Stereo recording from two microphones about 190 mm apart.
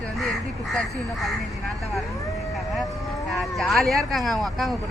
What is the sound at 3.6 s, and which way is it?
Speech, centre (ahead or behind).